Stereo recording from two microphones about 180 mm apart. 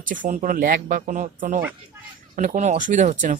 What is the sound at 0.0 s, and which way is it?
Speech, 45° right (ahead or behind).